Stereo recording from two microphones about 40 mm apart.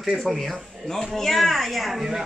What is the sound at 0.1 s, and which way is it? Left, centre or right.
Speech, centre.